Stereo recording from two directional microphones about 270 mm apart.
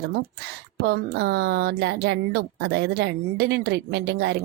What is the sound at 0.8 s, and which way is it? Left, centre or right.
Speech, right.